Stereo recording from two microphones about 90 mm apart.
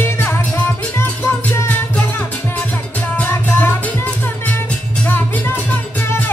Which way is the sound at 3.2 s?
25° left (ahead or behind).